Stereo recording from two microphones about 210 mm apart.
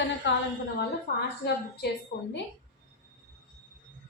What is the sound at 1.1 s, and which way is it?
A woman's voice, 55° left (ahead or behind).